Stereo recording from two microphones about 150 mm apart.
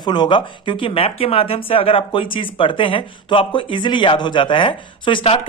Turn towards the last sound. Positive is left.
turn(degrees=35)  # may be behind; listen again after turning